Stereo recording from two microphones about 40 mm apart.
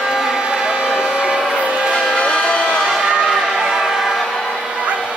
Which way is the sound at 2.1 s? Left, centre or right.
Left.